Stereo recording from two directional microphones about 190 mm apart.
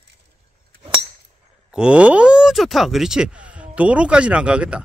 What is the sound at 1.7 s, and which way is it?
Speech, 5° right (ahead or behind).